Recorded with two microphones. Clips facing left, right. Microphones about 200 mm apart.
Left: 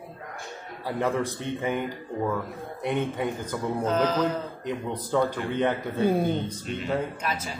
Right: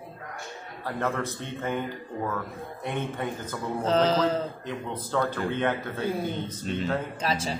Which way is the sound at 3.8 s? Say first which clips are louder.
Right 2 dB; 30° right (ahead or behind).